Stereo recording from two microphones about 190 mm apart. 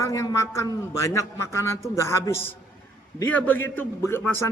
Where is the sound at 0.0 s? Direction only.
15° left (ahead or behind).